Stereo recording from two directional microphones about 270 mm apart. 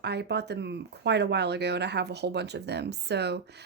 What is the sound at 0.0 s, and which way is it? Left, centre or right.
Speech, right.